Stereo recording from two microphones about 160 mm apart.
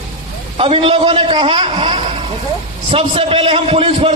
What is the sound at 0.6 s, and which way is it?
A man's voice, 35° right (ahead or behind).